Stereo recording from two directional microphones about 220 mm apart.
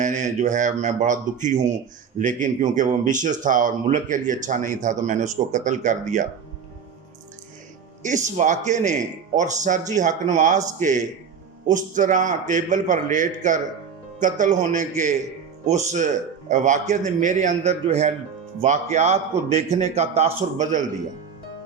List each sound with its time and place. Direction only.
0.0 s speech: 35° right (ahead or behind)
8.0 s speech: 35° right (ahead or behind)
11.6 s speech: 35° right (ahead or behind)